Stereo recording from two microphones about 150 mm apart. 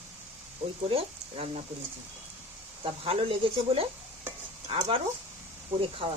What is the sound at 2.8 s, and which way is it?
Speech, 40° right (ahead or behind).